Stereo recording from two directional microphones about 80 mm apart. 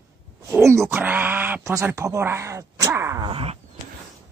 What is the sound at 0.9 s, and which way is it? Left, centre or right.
Speech, right.